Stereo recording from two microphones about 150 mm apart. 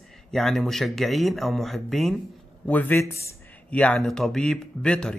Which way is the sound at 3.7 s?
5° left (ahead or behind).